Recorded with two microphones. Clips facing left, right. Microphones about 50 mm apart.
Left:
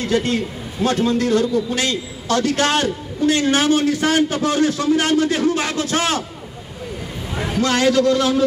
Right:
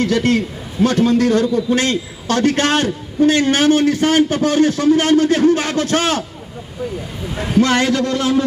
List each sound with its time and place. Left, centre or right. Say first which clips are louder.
0.0 s a man's voice: right 4 dB; right
1.0 s a man's voice: right 2 dB; right
7.6 s a man's voice: left 3 dB; right